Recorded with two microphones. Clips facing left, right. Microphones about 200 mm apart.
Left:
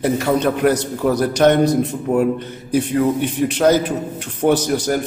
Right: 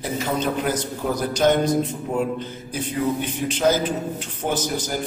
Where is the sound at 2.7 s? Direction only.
70° left (ahead or behind).